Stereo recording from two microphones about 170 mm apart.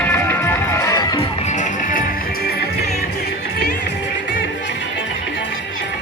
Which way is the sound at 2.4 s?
70° left (ahead or behind).